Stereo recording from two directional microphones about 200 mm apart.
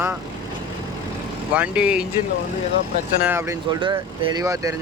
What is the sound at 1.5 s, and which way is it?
Speech, 5° right (ahead or behind).